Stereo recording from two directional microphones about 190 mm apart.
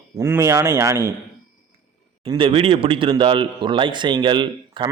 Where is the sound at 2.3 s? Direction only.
25° right (ahead or behind).